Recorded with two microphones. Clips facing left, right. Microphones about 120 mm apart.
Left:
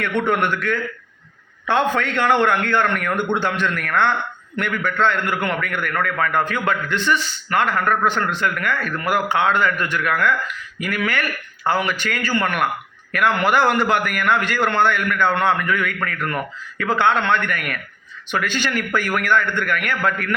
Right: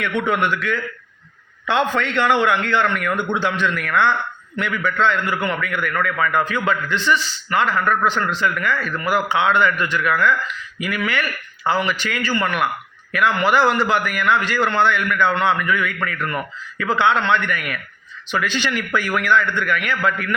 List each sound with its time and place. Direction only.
0.0 s a man's voice: 50° left (ahead or behind)